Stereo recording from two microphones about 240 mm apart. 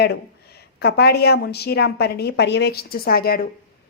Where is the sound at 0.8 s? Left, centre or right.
Left.